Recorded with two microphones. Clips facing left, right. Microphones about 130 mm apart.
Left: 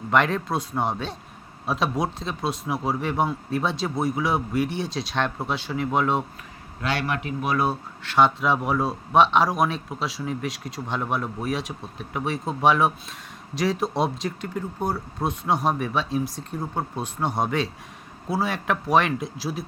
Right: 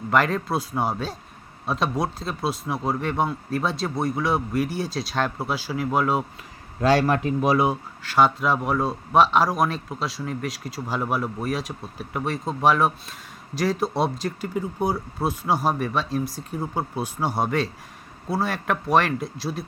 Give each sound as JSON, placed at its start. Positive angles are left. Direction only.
{"t": 0.1, "sound": "speech", "side_deg": 0}
{"t": 6.8, "sound": "a man's voice", "side_deg": -40}
{"t": 7.5, "sound": "speech", "side_deg": -15}
{"t": 8.0, "sound": "speech", "side_deg": 0}